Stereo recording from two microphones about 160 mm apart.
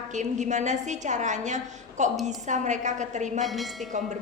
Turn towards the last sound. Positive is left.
turn(degrees=0)  # may be behind; listen again after turning